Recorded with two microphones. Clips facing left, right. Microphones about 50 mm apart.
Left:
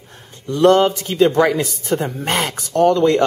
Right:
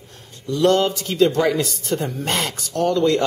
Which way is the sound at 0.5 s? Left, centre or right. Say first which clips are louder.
Left 4 dB; left.